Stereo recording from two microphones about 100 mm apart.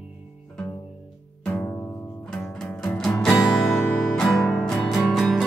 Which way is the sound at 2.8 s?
10° left (ahead or behind).